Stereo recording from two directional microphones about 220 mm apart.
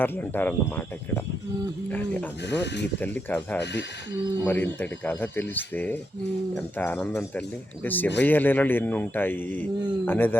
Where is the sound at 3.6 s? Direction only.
50° left (ahead or behind).